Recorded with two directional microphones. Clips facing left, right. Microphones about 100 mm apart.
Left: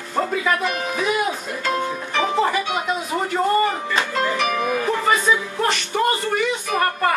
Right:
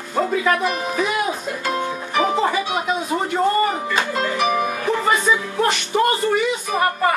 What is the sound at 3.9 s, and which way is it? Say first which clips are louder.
Music: even; 5° right (ahead or behind).